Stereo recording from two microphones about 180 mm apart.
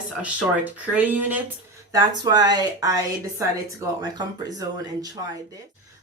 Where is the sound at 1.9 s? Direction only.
20° right (ahead or behind).